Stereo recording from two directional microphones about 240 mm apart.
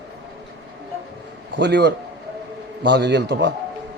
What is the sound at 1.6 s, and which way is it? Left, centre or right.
A man's voice, right.